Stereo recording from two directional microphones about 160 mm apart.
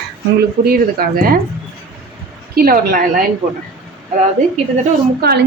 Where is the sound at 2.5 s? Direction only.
65° right (ahead or behind).